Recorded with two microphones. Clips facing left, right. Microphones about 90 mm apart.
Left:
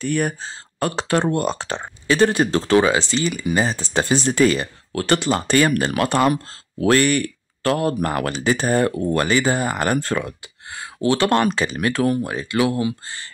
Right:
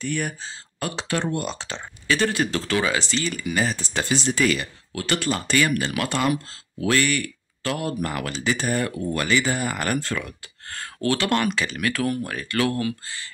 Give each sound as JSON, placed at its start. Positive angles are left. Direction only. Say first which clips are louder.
{"t": 0.0, "sound": "speech", "louder": "left 6 dB", "side_deg": 45}
{"t": 2.0, "sound": "speech", "louder": "left 5 dB", "side_deg": 35}
{"t": 3.7, "sound": "speech", "louder": "left 5 dB", "side_deg": 40}
{"t": 9.9, "sound": "speech", "louder": "left 5 dB", "side_deg": 40}
{"t": 10.2, "sound": "speech", "louder": "left 5 dB", "side_deg": 15}
{"t": 11.1, "sound": "speech", "louder": "left 6 dB", "side_deg": 35}